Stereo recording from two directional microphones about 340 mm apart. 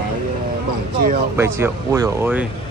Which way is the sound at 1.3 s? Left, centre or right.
Centre.